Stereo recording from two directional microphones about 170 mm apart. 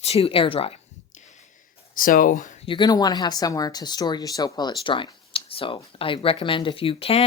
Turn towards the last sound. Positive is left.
turn(degrees=35)  # may be behind; listen again after turning